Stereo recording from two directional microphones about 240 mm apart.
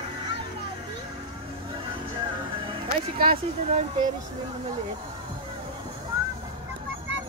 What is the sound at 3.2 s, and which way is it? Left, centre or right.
Speech, right.